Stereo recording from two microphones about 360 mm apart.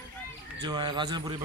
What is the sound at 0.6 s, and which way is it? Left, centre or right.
Speech, centre.